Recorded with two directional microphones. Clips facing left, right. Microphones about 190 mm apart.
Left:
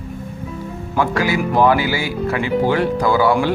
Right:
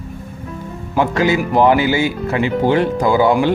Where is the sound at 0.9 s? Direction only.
20° right (ahead or behind).